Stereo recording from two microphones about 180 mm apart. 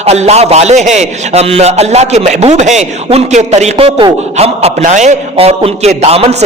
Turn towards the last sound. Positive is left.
turn(degrees=-35)  # may be behind; listen again after turning